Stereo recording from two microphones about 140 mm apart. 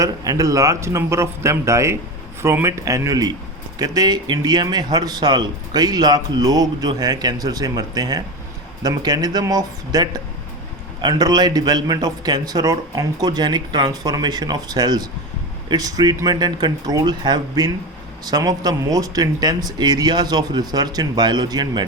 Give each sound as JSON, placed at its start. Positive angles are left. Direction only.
{"t": 0.0, "sound": "speech", "side_deg": -25}